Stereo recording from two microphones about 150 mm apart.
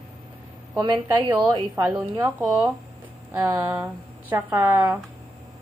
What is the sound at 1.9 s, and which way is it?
A woman's voice, 5° right (ahead or behind).